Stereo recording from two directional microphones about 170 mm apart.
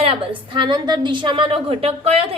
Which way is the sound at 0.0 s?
30° right (ahead or behind).